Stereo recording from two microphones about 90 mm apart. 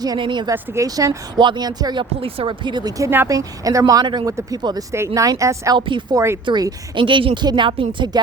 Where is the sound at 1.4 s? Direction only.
55° right (ahead or behind).